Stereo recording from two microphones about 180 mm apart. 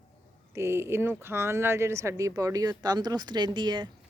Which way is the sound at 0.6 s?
15° right (ahead or behind).